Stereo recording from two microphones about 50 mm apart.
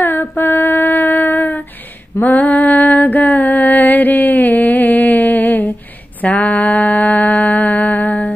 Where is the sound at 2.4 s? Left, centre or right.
Left.